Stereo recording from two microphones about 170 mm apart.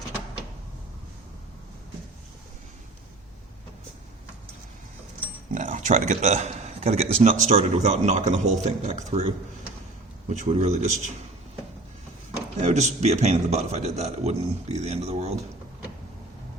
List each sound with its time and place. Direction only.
5.5 s speech: 50° right (ahead or behind)
12.6 s speech: 40° right (ahead or behind)